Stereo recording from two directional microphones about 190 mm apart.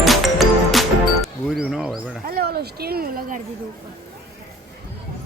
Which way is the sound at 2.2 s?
55° right (ahead or behind).